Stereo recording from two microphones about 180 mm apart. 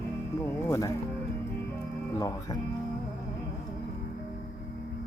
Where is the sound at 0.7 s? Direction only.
15° left (ahead or behind).